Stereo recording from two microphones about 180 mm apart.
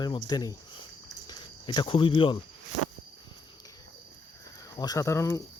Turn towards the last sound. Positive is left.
turn(degrees=15)  # may be behind; listen again after turning